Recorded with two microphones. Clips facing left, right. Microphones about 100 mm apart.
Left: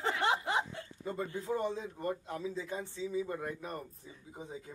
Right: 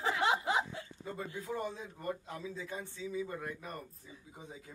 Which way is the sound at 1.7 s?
20° left (ahead or behind).